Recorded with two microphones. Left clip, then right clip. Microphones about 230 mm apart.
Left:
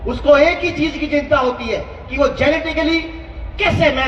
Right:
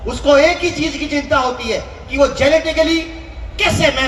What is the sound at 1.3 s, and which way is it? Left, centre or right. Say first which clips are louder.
Speech: right 2 dB; right.